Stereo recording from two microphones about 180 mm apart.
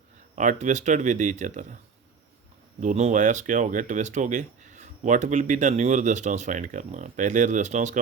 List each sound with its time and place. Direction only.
0.3 s speech: 45° right (ahead or behind)
2.8 s speech: 40° right (ahead or behind)